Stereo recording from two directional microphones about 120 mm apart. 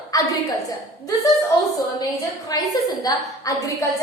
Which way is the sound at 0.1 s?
30° left (ahead or behind).